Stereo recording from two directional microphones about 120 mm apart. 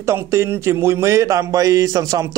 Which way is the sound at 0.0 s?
25° right (ahead or behind).